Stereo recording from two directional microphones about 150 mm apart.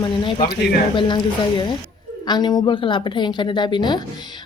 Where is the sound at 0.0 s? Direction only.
35° left (ahead or behind).